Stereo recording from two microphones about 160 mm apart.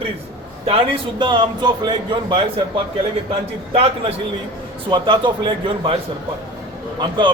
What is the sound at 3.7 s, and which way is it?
A man's voice, 30° right (ahead or behind).